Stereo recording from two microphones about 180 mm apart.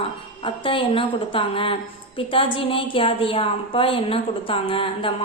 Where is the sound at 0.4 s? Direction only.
30° left (ahead or behind).